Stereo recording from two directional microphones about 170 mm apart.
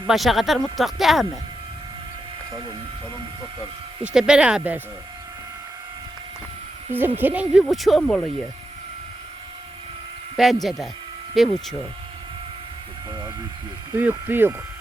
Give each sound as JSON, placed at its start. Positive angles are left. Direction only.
{"t": 0.1, "sound": "speech", "side_deg": 0}
{"t": 4.0, "sound": "speech", "side_deg": -5}
{"t": 6.9, "sound": "speech", "side_deg": -10}
{"t": 10.3, "sound": "speech", "side_deg": 0}
{"t": 13.1, "sound": "vehicle", "side_deg": -25}
{"t": 13.9, "sound": "speech", "side_deg": -10}